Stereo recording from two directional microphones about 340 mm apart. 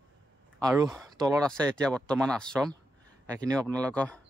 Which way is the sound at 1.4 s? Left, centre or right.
Centre.